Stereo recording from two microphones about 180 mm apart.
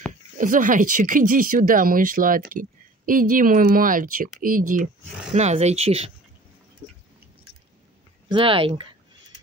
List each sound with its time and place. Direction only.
0.4 s speech: 45° right (ahead or behind)
5.3 s speech: 40° right (ahead or behind)
8.3 s speech: 30° right (ahead or behind)